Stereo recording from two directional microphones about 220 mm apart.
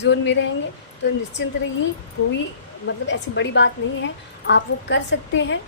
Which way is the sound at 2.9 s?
55° left (ahead or behind).